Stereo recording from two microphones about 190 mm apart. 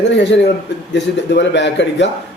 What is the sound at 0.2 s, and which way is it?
A man's voice, 65° left (ahead or behind).